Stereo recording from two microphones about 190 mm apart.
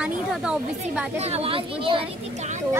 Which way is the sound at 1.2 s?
35° right (ahead or behind).